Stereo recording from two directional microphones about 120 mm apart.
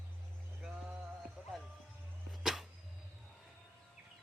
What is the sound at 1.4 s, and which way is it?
Music, 5° right (ahead or behind).